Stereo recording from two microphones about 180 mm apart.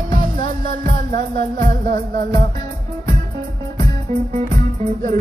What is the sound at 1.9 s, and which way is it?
Speech, 50° right (ahead or behind).